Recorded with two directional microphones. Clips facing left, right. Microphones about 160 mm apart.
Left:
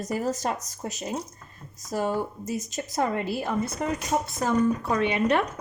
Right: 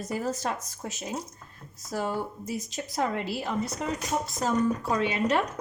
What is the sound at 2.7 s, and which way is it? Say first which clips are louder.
Speech: left 2 dB; 50° left (ahead or behind).